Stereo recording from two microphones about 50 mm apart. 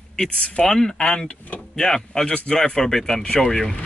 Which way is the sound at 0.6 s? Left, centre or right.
Centre.